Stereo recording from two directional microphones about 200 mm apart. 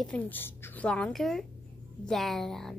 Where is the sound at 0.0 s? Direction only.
5° left (ahead or behind).